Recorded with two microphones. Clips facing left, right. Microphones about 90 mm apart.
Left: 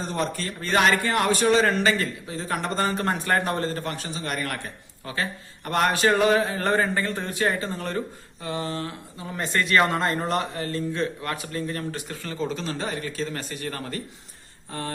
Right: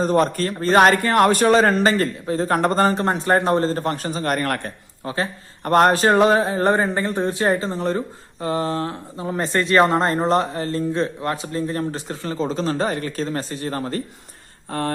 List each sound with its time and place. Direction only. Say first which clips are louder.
0.0 s a man's voice: right 10 dB; 50° right (ahead or behind)
2.9 s speech: right 5 dB; 25° right (ahead or behind); by 4.7 s 50° right (ahead or behind)
5.0 s speech: right 5 dB; 30° right (ahead or behind)
5.6 s a sound: right 6 dB; 40° right (ahead or behind); by 8.0 s 25° right (ahead or behind)
8.4 s speech: right 7 dB; 40° right (ahead or behind)
14.7 s a sound: right 8 dB; 55° right (ahead or behind)